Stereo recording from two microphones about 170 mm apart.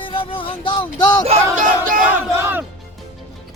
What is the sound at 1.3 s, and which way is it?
Battle cry, 45° right (ahead or behind).